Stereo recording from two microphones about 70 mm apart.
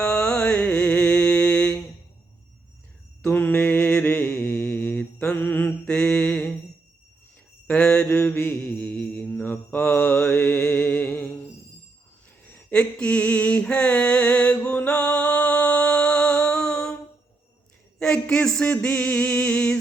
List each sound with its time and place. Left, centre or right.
0.0 s mantra: centre
3.2 s mantra: left
4.8 s mantra: centre
5.8 s mantra: centre
6.1 s a sound: centre
7.7 s mantra: centre
8.0 s mantra: left
8.6 s mantra: centre
9.3 s mantra: left
10.6 s music: centre
12.8 s mantra: centre
18.0 s a sound: centre
18.6 s music: left